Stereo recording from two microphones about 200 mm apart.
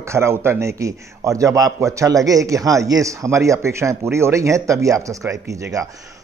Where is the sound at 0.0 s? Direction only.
15° right (ahead or behind).